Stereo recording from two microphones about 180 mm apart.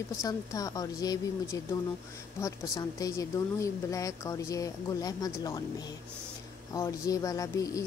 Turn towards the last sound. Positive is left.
turn(degrees=20)  # may be behind; listen again after turning